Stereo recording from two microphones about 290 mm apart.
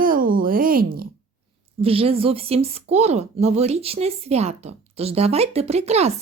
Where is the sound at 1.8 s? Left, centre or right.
Centre.